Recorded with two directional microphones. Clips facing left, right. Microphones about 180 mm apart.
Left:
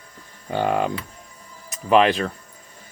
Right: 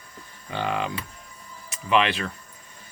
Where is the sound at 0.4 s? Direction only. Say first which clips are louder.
Left 6 dB; 45° left (ahead or behind).